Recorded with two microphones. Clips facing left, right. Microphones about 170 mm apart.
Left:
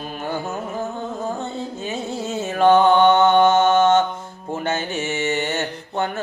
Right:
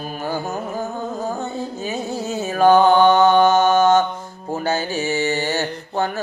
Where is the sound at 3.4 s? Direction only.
25° left (ahead or behind).